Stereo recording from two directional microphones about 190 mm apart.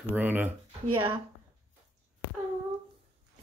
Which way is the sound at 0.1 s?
10° right (ahead or behind).